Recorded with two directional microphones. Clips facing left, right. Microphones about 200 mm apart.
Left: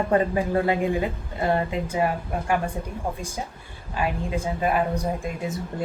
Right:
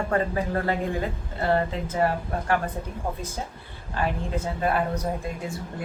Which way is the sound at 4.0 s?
10° left (ahead or behind).